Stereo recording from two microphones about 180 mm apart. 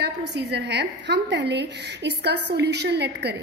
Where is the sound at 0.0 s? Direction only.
70° right (ahead or behind).